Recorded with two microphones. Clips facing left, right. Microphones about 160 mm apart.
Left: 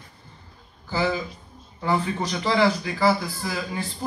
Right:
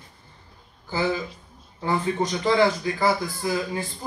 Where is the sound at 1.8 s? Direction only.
50° right (ahead or behind).